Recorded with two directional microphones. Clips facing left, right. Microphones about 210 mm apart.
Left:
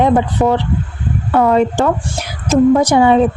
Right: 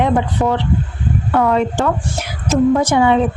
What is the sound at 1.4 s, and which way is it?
A woman's voice, 35° left (ahead or behind).